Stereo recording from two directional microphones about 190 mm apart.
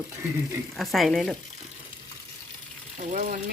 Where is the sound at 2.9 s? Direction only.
40° right (ahead or behind).